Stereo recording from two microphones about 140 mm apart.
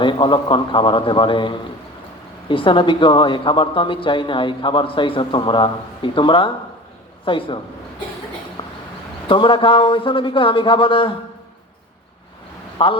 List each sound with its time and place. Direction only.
0.0 s speech: 35° left (ahead or behind)
8.6 s a sound: 40° left (ahead or behind)
9.3 s speech: 35° left (ahead or behind)
12.8 s speech: 40° left (ahead or behind)